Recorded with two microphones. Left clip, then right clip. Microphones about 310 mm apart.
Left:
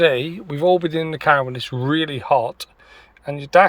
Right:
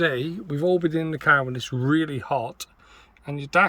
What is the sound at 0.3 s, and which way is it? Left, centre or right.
Speech, left.